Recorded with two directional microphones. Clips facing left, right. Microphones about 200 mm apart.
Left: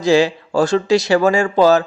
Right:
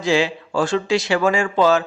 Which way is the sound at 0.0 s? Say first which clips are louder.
Left 5 dB; 40° left (ahead or behind).